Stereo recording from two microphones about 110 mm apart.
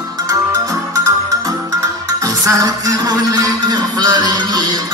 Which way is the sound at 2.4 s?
35° right (ahead or behind).